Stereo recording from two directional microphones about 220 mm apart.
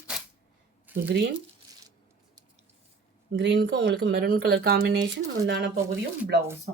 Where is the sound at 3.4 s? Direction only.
55° right (ahead or behind).